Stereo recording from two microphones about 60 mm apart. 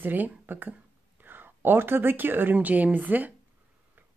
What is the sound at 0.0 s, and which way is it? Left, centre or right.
Speech, right.